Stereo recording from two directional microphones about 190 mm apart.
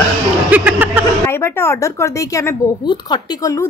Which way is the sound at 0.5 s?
10° right (ahead or behind).